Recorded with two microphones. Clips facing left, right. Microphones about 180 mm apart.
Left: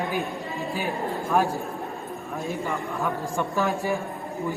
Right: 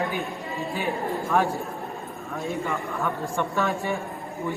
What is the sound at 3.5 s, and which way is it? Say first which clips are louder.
Speech: left 1 dB; centre (ahead or behind).